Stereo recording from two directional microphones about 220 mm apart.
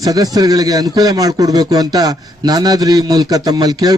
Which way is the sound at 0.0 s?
15° right (ahead or behind).